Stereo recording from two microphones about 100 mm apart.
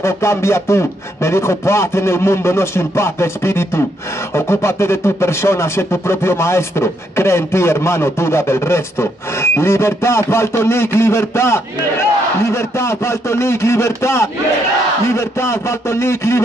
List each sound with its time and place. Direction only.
0.0 s speech: 25° left (ahead or behind)